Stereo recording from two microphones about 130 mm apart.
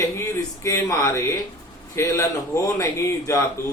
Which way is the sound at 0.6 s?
25° left (ahead or behind).